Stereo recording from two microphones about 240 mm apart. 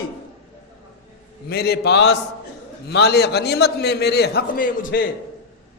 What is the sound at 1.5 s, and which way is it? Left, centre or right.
A man's voice, left.